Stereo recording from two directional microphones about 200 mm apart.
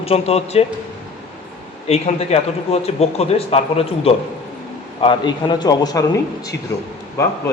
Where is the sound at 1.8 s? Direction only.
30° left (ahead or behind).